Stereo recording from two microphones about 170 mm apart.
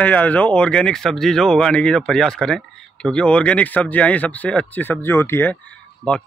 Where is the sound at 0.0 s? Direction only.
10° left (ahead or behind).